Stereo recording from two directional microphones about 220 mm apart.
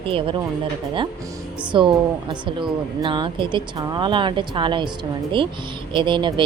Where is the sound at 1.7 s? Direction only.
20° right (ahead or behind).